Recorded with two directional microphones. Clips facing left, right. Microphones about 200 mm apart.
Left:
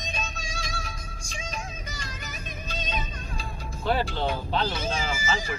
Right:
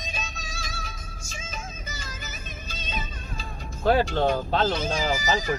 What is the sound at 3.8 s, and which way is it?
Speech, 50° right (ahead or behind).